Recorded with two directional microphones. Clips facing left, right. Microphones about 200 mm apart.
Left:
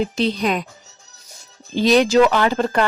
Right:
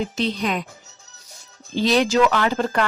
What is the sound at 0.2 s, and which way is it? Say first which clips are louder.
Speech: left 3 dB; 35° left (ahead or behind).